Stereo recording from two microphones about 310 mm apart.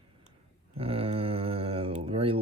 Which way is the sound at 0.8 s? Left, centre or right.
Centre.